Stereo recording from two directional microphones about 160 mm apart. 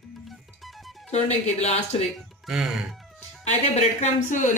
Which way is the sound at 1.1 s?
45° left (ahead or behind).